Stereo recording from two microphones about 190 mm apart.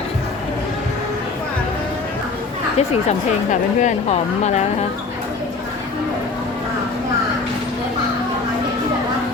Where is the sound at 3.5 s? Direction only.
40° left (ahead or behind).